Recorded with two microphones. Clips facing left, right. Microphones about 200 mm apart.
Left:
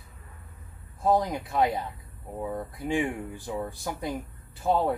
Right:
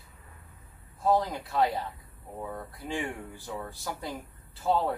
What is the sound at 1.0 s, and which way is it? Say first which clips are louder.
Speech: left 2 dB; 15° left (ahead or behind).